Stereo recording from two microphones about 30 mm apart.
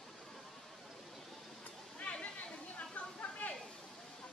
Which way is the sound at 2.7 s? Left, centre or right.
Left.